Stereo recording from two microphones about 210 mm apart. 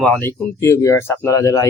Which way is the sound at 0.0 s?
10° left (ahead or behind).